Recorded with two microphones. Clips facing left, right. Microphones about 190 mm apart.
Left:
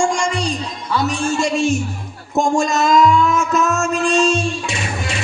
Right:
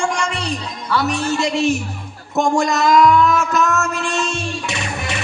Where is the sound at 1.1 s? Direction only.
60° right (ahead or behind).